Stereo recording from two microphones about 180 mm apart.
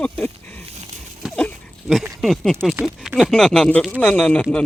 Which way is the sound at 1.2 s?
5° left (ahead or behind).